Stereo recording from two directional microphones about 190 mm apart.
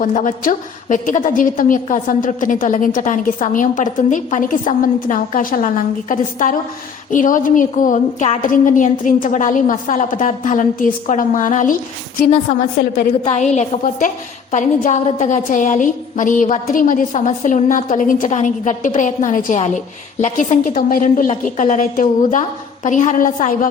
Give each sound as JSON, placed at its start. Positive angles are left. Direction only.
{"t": 0.0, "sound": "a woman's voice", "side_deg": 40}
{"t": 13.3, "sound": "a woman's voice", "side_deg": 35}